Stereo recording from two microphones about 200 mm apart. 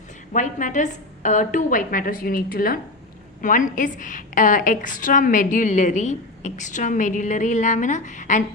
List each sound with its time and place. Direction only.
0.3 s a woman's voice: 40° left (ahead or behind)